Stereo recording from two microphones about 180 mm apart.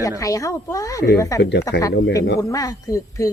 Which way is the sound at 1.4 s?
70° left (ahead or behind).